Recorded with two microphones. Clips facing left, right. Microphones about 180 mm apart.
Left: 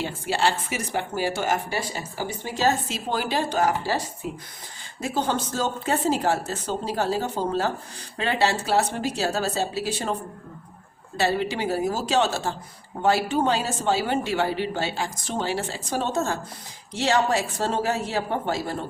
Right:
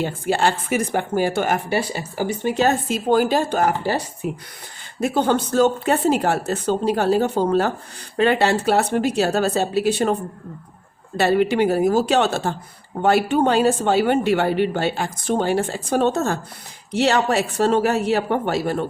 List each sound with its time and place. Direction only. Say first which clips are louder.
0.0 s speech: right 4 dB; 50° right (ahead or behind)
11.2 s speech: right 7 dB; 60° right (ahead or behind)